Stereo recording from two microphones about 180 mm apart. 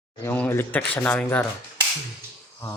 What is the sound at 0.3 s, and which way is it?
A man's voice, 10° left (ahead or behind).